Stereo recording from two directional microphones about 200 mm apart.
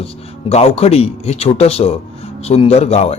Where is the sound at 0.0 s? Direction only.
30° left (ahead or behind).